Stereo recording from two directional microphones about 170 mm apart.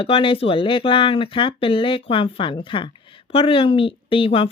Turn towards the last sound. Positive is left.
turn(degrees=30)  # may be behind; listen again after turning